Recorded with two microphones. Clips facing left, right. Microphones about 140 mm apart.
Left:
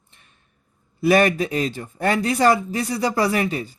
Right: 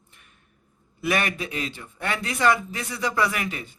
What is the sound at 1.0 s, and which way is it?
Speech, 35° left (ahead or behind).